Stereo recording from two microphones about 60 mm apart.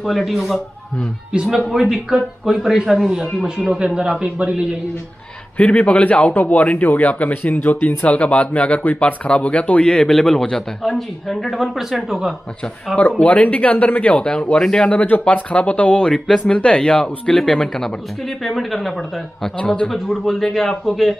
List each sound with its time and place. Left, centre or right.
0.0 s a man's voice: centre
5.6 s speech: left; by 12.4 s centre
13.2 s speech: left
14.1 s speech: centre
14.9 s a man's voice: left; by 18.9 s centre
19.6 s speech: centre
19.9 s a man's voice: centre